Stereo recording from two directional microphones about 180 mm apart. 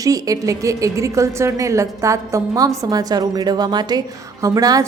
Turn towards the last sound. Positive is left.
turn(degrees=-20)  # may be behind; listen again after turning